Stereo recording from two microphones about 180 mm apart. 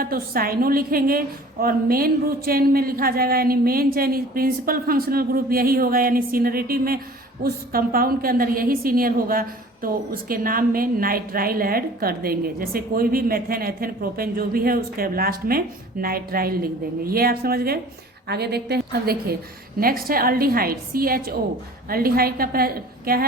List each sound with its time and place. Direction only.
0.0 s a woman's voice: 55° right (ahead or behind)